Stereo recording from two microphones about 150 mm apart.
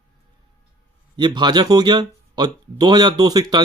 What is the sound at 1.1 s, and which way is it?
Speech, 30° right (ahead or behind).